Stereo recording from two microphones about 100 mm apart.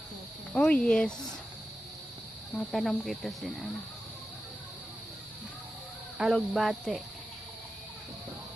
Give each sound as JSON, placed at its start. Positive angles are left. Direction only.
{"t": 0.5, "sound": "speech", "side_deg": 10}
{"t": 2.6, "sound": "speech", "side_deg": 5}
{"t": 6.1, "sound": "speech", "side_deg": -5}